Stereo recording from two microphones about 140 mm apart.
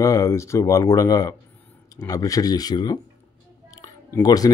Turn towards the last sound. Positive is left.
turn(degrees=25)  # may be behind; listen again after turning